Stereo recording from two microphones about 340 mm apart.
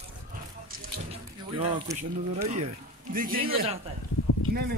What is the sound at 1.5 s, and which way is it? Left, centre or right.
Speech, centre.